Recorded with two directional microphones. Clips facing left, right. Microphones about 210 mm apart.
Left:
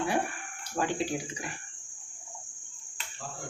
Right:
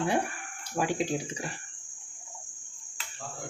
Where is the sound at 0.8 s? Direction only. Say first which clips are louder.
Right 1 dB; 10° right (ahead or behind).